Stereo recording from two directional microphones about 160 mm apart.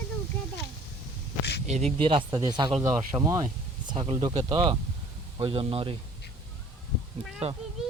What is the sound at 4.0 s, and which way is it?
Speech, 40° right (ahead or behind).